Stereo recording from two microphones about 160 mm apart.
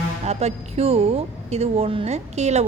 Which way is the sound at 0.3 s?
45° right (ahead or behind).